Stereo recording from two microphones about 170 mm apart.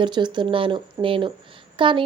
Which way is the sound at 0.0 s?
25° right (ahead or behind).